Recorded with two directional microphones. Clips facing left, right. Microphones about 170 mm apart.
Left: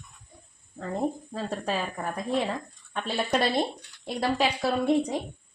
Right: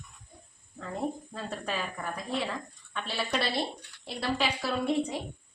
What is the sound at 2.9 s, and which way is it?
Speech, 45° left (ahead or behind).